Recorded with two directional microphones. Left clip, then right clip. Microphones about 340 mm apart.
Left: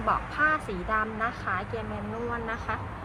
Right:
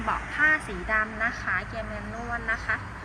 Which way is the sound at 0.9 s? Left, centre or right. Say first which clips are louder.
Right 2 dB; centre.